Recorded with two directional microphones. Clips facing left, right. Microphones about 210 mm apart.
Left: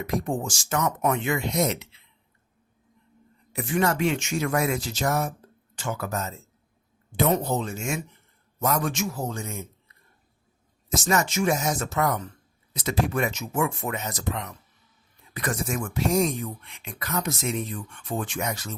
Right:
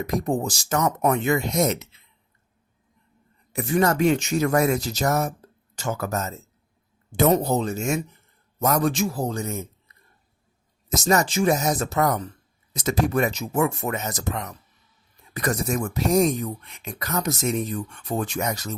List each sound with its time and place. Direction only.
0.0 s speech: 40° right (ahead or behind)
3.5 s speech: 40° right (ahead or behind)
10.8 s speech: 40° right (ahead or behind)